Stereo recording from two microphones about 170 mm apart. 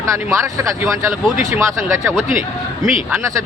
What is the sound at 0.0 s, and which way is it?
Speech, 15° right (ahead or behind).